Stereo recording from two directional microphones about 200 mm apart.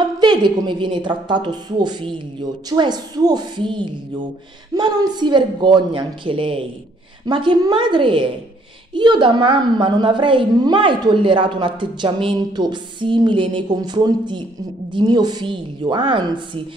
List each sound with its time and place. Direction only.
0.0 s a woman's voice: 20° right (ahead or behind)